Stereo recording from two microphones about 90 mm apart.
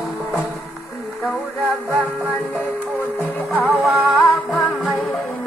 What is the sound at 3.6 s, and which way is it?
Music, 5° right (ahead or behind).